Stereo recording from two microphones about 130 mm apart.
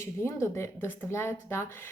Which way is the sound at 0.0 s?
20° left (ahead or behind).